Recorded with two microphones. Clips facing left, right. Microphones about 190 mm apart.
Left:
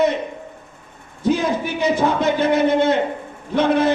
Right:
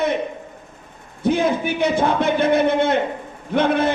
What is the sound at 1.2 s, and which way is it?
A man's voice, 55° right (ahead or behind).